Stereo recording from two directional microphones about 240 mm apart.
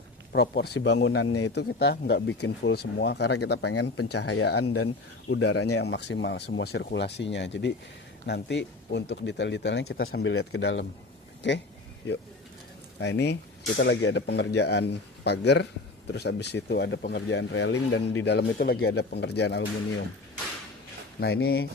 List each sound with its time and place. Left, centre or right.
0.3 s speech: left
1.3 s speech: left
1.5 s speech: left
13.0 s speech: left
21.2 s speech: left